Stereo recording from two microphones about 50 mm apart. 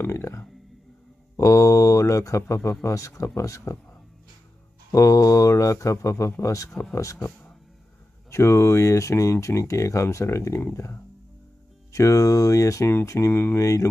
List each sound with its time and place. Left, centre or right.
0.1 s speech: left
1.3 s speech: left
4.9 s speech: left
6.8 s speech: left
8.3 s speech: left
11.9 s speech: left
13.3 s speech: left
13.6 s speech: left